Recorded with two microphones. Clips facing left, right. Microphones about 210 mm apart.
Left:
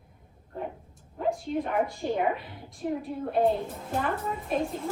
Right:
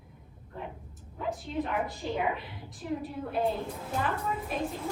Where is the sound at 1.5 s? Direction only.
50° left (ahead or behind).